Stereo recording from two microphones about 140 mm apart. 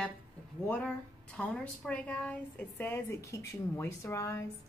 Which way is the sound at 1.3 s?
10° left (ahead or behind).